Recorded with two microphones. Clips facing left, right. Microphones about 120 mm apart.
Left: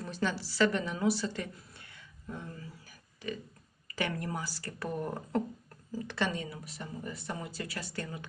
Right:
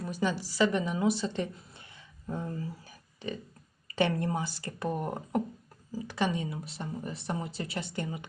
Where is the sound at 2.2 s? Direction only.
35° right (ahead or behind).